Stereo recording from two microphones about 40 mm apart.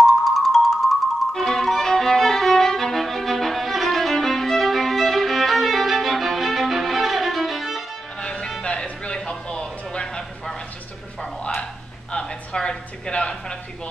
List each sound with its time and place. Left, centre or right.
0.0 s marimba: centre
1.3 s violin: centre
8.2 s music: centre
12.1 s a sound: left
13.1 s speech: left